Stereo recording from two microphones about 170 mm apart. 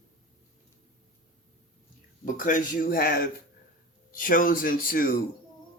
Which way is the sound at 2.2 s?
50° left (ahead or behind).